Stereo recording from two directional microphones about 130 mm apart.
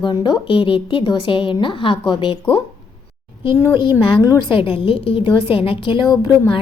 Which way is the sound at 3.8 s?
40° left (ahead or behind).